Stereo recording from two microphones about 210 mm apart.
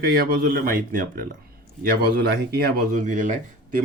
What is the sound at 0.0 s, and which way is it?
Speech, 45° right (ahead or behind).